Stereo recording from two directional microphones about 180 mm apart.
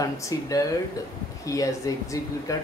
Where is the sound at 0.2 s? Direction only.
20° left (ahead or behind).